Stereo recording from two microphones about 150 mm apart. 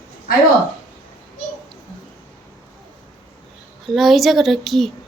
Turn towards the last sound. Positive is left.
turn(degrees=0)  # may be behind; listen again after turning